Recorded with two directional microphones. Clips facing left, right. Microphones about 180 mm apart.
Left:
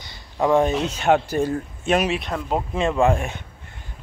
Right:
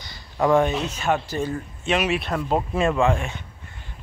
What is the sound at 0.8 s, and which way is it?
Speech, 70° left (ahead or behind).